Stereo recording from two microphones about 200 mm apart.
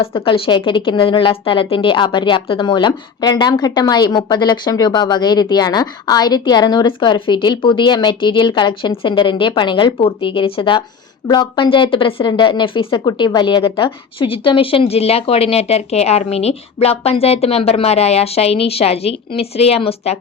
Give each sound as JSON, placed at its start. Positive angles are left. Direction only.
{"t": 0.3, "sound": "a woman's voice", "side_deg": 25}